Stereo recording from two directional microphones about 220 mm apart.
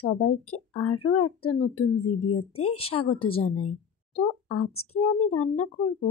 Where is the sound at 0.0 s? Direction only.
90° left.